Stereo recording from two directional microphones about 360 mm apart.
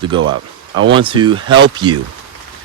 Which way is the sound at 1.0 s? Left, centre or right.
Centre.